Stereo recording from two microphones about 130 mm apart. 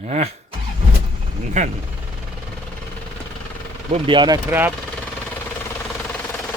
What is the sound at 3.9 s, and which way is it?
Speech, 35° right (ahead or behind).